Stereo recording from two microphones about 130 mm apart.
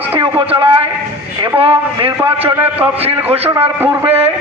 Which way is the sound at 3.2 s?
50° right (ahead or behind).